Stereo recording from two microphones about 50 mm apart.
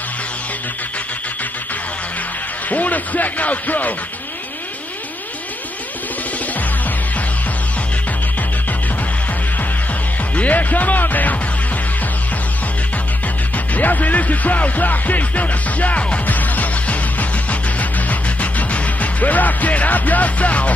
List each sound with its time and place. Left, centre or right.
2.7 s music: left
10.3 s music: left
13.7 s music: left